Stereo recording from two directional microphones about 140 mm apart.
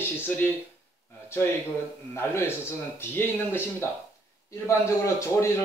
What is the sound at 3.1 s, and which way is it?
Speech, 15° left (ahead or behind).